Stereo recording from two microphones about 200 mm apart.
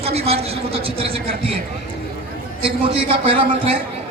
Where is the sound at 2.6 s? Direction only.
30° right (ahead or behind).